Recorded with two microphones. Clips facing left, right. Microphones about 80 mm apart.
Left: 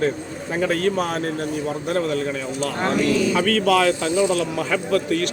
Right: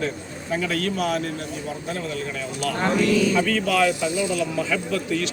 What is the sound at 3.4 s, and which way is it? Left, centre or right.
Speech, left.